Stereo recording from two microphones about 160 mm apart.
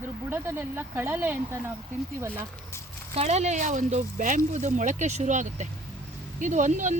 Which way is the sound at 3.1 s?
45° right (ahead or behind).